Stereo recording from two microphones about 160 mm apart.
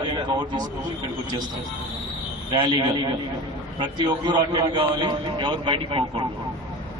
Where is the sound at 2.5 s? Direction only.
30° right (ahead or behind).